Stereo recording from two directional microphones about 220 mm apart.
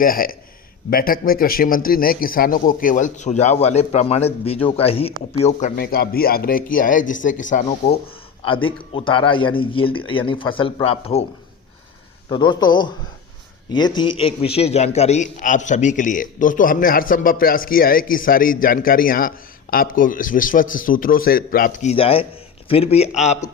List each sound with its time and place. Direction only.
0.0 s a man's voice: 40° left (ahead or behind)
8.4 s speech: 25° left (ahead or behind)
12.3 s a man's voice: 20° left (ahead or behind)